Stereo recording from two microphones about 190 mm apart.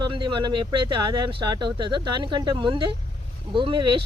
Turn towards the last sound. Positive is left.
turn(degrees=-25)  # may be behind; listen again after turning